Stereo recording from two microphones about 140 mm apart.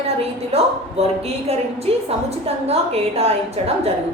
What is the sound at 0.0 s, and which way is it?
A woman's voice, 50° right (ahead or behind).